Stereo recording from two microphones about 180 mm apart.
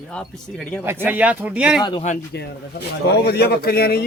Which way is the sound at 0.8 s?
10° right (ahead or behind).